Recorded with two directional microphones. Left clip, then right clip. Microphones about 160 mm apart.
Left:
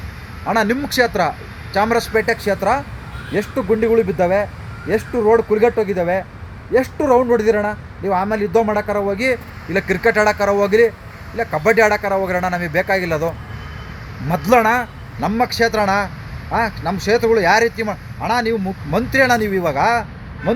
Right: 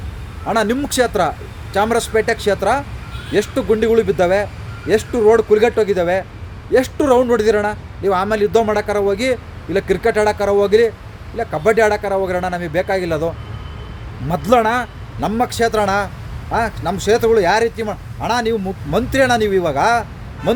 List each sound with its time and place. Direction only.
0.4 s speech: 15° right (ahead or behind)
3.3 s speech: 35° right (ahead or behind)
5.1 s speech: 15° right (ahead or behind)
5.6 s speech: 30° right (ahead or behind)
9.0 s speech: 10° right (ahead or behind)